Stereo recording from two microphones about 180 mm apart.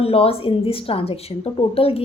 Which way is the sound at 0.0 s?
30° left (ahead or behind).